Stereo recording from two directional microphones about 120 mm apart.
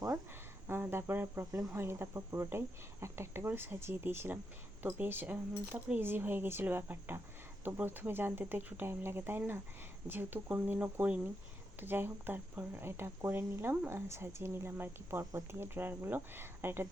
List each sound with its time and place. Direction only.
0.7 s speech: 20° right (ahead or behind)